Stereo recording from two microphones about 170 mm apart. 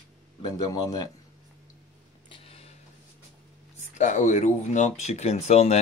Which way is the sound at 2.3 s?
35° left (ahead or behind).